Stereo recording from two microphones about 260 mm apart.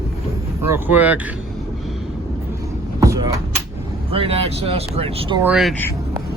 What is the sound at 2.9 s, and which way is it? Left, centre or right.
Vehicle, centre.